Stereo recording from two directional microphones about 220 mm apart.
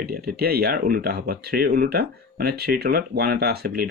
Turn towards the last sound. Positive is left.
turn(degrees=-45)  # may be behind; listen again after turning